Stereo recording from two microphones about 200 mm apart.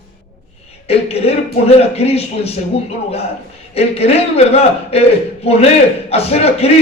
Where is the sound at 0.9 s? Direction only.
30° left (ahead or behind).